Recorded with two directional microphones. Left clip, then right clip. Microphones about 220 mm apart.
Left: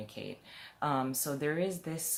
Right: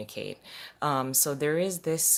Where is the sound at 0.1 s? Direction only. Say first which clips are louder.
Right 7 dB; 50° right (ahead or behind).